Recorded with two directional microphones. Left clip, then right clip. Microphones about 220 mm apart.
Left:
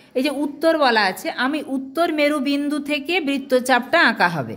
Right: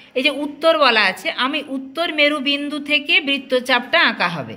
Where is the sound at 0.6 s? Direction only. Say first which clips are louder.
Right 3 dB; 35° left (ahead or behind).